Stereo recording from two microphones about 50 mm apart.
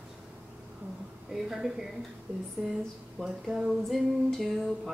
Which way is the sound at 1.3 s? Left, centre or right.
Centre.